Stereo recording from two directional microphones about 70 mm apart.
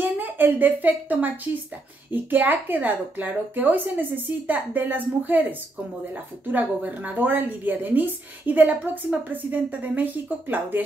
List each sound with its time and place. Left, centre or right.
0.0 s a woman's voice: right
6.4 s a woman's voice: right